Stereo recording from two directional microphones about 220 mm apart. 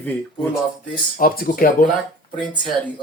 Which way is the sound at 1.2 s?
40° left (ahead or behind).